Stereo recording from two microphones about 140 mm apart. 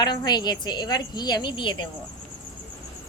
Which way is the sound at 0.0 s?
30° left (ahead or behind).